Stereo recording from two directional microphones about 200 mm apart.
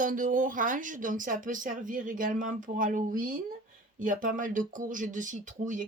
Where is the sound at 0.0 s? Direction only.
40° right (ahead or behind).